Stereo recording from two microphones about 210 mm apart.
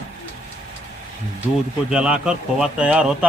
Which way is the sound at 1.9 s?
5° right (ahead or behind).